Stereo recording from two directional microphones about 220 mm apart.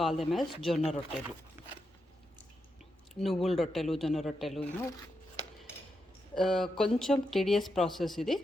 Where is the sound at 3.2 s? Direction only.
Centre (ahead or behind).